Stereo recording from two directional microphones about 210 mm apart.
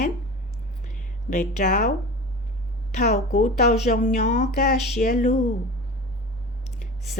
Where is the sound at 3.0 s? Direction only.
35° left (ahead or behind).